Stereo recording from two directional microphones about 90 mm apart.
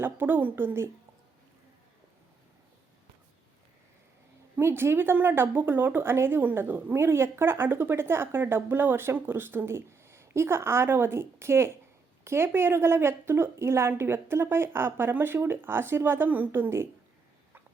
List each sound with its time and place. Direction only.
0.0 s a woman's voice: 25° right (ahead or behind)
4.6 s a woman's voice: 25° right (ahead or behind)